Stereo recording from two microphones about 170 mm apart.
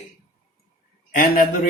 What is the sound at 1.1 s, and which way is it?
Speech, 60° left (ahead or behind).